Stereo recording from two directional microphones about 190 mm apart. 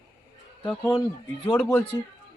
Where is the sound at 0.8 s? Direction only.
20° left (ahead or behind).